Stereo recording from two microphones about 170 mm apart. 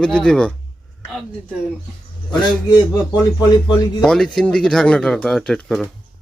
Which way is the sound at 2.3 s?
25° left (ahead or behind).